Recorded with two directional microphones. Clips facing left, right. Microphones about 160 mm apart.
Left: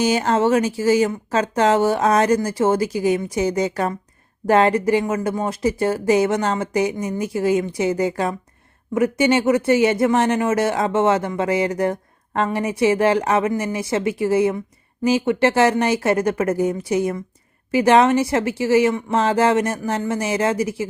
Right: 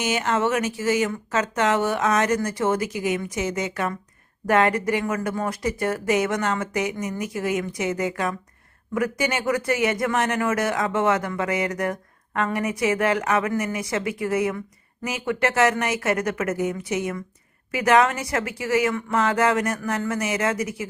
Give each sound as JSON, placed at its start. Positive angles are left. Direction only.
{"t": 0.0, "sound": "speech", "side_deg": 35}